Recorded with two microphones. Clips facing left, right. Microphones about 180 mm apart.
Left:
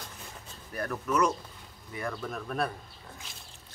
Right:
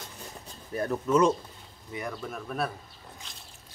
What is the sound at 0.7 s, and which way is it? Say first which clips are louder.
Speech: right 5 dB; 25° right (ahead or behind).